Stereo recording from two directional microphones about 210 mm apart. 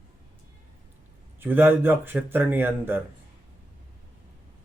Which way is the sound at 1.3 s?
10° right (ahead or behind).